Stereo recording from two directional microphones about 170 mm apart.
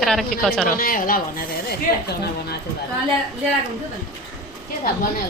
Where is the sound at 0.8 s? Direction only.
55° left (ahead or behind).